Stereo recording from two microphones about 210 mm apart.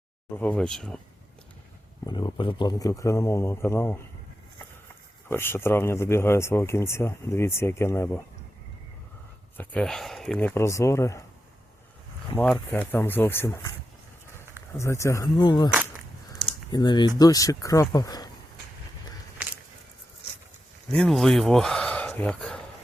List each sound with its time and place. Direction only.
0.3 s speech: 5° left (ahead or behind)
2.0 s speech: 20° left (ahead or behind)
5.3 s speech: 10° left (ahead or behind)
9.6 s speech: 5° left (ahead or behind)
12.4 s speech: 10° left (ahead or behind)
14.8 s speech: 15° left (ahead or behind)
20.9 s speech: centre (ahead or behind)